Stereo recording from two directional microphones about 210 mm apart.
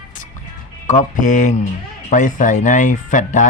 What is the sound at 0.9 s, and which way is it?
Speech, 35° left (ahead or behind).